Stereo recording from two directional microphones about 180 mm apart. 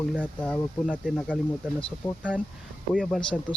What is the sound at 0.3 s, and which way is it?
Speech, 10° left (ahead or behind).